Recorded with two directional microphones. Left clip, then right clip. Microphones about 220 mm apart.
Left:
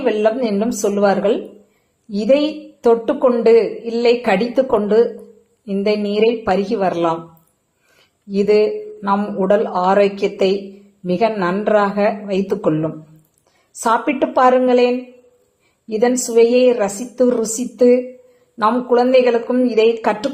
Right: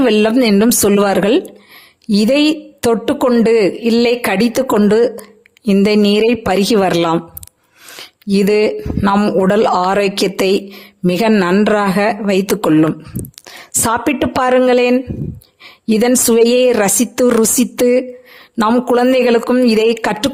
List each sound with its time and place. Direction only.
0.0 s a woman's voice: 50° right (ahead or behind)
8.3 s a woman's voice: 50° right (ahead or behind)
13.8 s a woman's voice: 50° right (ahead or behind)